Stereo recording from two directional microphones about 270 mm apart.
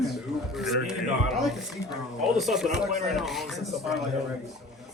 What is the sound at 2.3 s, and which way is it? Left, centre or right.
Speech, centre.